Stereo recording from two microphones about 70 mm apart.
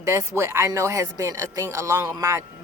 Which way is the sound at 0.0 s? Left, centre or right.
Right.